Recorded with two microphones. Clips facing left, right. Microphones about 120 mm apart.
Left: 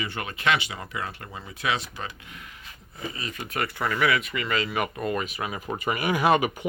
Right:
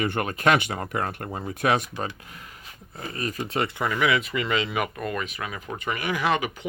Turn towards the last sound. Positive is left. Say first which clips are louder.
# left 3 dB
turn(degrees=20)  # may be behind; listen again after turning